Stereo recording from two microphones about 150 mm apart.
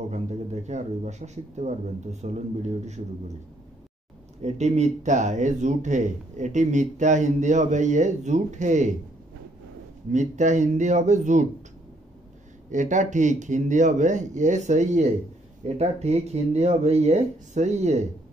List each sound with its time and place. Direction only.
0.1 s speech: 50° right (ahead or behind)
4.4 s speech: 50° right (ahead or behind)
10.1 s speech: 55° right (ahead or behind)
12.7 s speech: 55° right (ahead or behind)